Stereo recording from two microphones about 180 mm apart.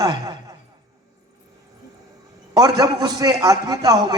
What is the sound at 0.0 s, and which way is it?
Speech, 20° right (ahead or behind).